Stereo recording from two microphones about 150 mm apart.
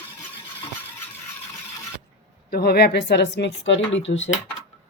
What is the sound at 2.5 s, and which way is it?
A woman's voice, 90° left.